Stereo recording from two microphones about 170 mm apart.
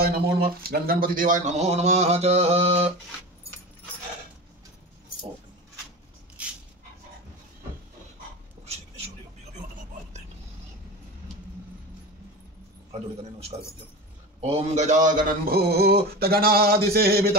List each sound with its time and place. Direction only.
0.0 s speech: 65° right (ahead or behind); by 2.9 s 40° right (ahead or behind)
6.4 s dog: 10° right (ahead or behind)
12.9 s speech: 40° right (ahead or behind)
14.4 s a sound: 40° right (ahead or behind); by 17.4 s 65° right (ahead or behind)